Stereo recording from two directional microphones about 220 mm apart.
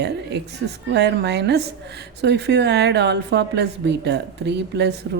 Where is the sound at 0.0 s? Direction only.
50° right (ahead or behind).